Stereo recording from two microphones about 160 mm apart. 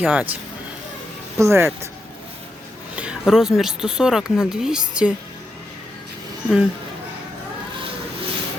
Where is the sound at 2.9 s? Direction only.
5° right (ahead or behind).